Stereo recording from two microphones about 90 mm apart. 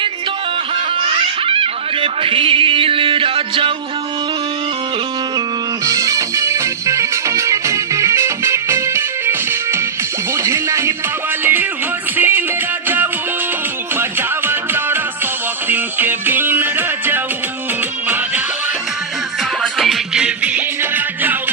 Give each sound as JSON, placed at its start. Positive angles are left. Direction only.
{"t": 0.9, "sound": "music", "side_deg": -90}
{"t": 5.8, "sound": "music", "side_deg": -40}
{"t": 13.9, "sound": "music", "side_deg": -25}
{"t": 19.6, "sound": "music", "side_deg": 0}